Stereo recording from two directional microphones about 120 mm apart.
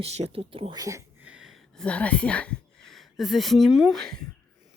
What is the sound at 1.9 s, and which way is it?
Speech, 10° left (ahead or behind).